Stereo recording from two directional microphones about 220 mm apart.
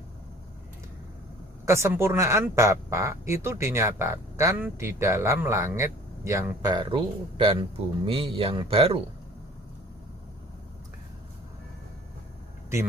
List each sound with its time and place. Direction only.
1.7 s speech: 10° right (ahead or behind)